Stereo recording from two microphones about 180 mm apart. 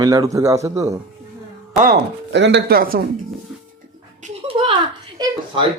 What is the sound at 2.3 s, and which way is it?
Speech, 80° right.